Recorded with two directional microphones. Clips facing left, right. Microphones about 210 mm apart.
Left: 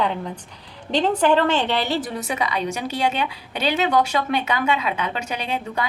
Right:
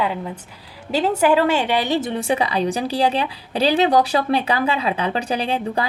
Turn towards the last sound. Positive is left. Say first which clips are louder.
# right 5 dB
turn(degrees=-30)  # may be behind; listen again after turning